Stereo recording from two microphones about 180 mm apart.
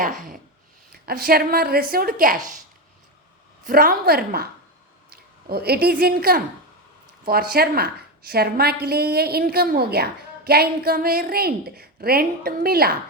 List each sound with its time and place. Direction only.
0.0 s speech: 45° right (ahead or behind)
1.0 s a woman's voice: 60° right (ahead or behind)
3.7 s a woman's voice: 55° right (ahead or behind)